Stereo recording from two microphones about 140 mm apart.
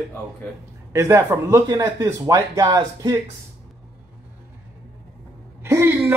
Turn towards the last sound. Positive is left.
turn(degrees=-20)  # may be behind; listen again after turning